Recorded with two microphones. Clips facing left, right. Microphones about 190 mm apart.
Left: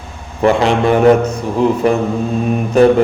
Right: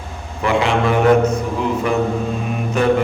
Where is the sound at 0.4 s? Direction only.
35° left (ahead or behind).